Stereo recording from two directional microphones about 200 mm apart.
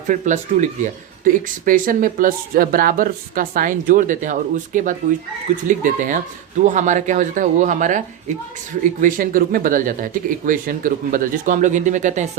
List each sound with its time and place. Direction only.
0.1 s speech: 40° right (ahead or behind)